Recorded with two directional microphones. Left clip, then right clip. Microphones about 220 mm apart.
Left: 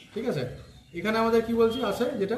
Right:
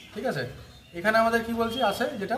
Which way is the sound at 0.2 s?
30° right (ahead or behind).